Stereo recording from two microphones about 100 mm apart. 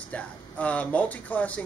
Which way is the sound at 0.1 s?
15° left (ahead or behind).